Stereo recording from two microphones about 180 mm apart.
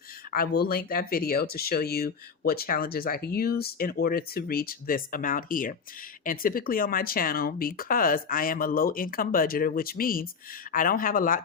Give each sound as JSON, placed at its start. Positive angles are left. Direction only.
{"t": 0.3, "sound": "speech", "side_deg": 55}